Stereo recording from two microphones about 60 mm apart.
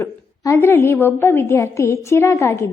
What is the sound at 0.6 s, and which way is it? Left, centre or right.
Speech, left.